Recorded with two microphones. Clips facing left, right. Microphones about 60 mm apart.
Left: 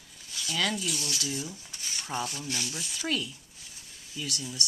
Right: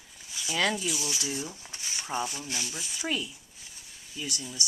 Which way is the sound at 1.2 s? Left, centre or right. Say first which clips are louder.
Right 1 dB; right.